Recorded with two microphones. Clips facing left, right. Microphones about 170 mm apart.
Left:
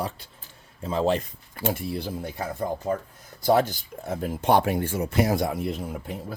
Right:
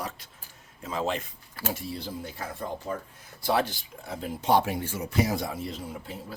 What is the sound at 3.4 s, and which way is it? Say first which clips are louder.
Speech: left 6 dB; 45° left (ahead or behind).